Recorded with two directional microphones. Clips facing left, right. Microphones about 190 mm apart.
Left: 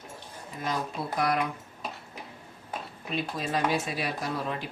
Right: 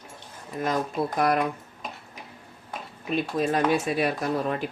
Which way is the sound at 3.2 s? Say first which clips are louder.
Right 5 dB; 50° right (ahead or behind).